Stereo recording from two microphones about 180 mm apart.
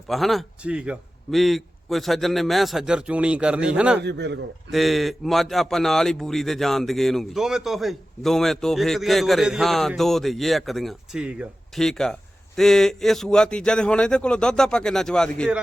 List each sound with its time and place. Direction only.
0.1 s a man's voice: centre (ahead or behind)
4.0 s a man's voice: 70° right (ahead or behind)
4.7 s a man's voice: centre (ahead or behind)